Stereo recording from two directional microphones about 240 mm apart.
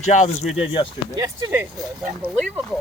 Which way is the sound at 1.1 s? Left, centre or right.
Centre.